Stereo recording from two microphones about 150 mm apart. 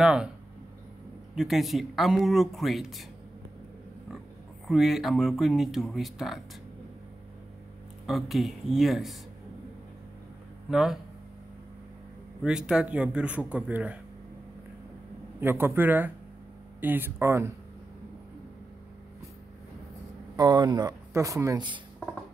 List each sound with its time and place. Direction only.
0.0 s speech: 5° right (ahead or behind)
1.3 s speech: centre (ahead or behind)
4.6 s speech: centre (ahead or behind)
8.1 s speech: centre (ahead or behind)
10.7 s speech: centre (ahead or behind)
12.4 s speech: 5° right (ahead or behind)
15.4 s speech: 15° right (ahead or behind)
20.3 s speech: 30° right (ahead or behind)